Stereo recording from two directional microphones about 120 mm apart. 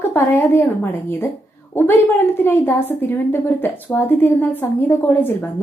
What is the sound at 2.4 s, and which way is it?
A woman's voice, 20° left (ahead or behind).